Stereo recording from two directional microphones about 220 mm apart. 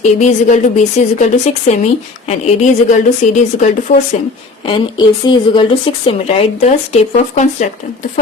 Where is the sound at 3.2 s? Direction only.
30° left (ahead or behind).